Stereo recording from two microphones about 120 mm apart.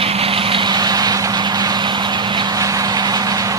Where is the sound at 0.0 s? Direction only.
55° right (ahead or behind).